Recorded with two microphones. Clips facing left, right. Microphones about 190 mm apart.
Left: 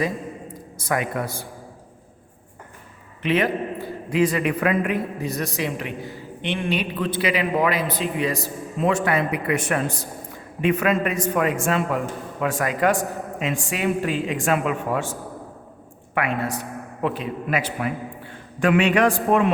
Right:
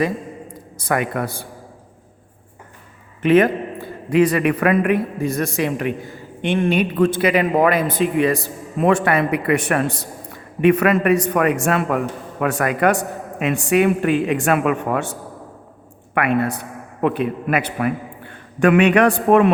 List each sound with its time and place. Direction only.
0.8 s a man's voice: 60° right (ahead or behind)
3.2 s a man's voice: 50° right (ahead or behind)
16.1 s a man's voice: 60° right (ahead or behind)